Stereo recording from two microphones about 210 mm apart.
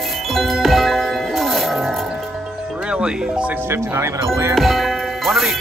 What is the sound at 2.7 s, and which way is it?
Speech, 5° right (ahead or behind).